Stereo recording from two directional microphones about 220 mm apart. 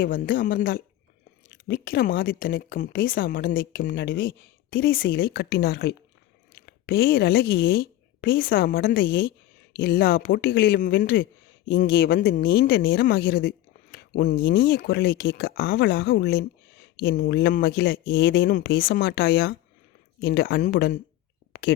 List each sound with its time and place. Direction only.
0.0 s a woman's voice: 40° left (ahead or behind)